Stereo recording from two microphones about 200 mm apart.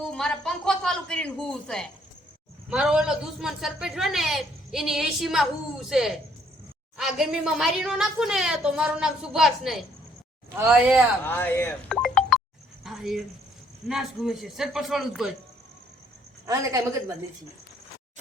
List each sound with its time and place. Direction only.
0.0 s a man's voice: 5° left (ahead or behind)
11.3 s speech: 10° left (ahead or behind)
12.0 s music: centre (ahead or behind)
12.8 s a sound: centre (ahead or behind)
13.8 s a man's voice: centre (ahead or behind)
16.5 s a woman's voice: 15° right (ahead or behind)